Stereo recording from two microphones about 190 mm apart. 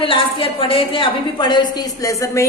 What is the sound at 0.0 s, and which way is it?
A woman's voice, 25° left (ahead or behind).